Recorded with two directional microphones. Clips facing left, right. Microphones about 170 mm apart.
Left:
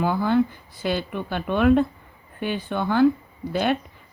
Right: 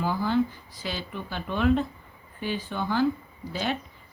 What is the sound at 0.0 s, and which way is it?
A woman's voice, 60° left (ahead or behind).